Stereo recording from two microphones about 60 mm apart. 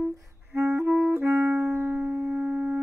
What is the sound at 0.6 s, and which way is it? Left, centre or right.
Clarinet, right.